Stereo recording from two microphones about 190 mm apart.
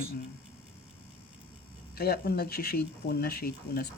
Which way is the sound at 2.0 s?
55° left (ahead or behind).